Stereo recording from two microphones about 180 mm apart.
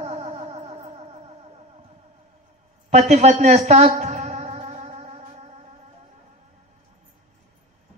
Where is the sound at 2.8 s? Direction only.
40° right (ahead or behind).